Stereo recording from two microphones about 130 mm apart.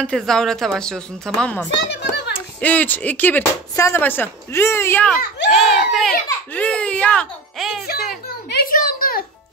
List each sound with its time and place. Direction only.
0.0 s a woman's voice: 5° left (ahead or behind)
5.0 s a child's voice: centre (ahead or behind)
8.6 s a sound: 90° left